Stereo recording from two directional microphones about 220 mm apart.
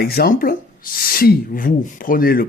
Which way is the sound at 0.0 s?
45° left (ahead or behind).